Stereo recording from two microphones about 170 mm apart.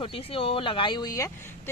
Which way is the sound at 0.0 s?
30° left (ahead or behind).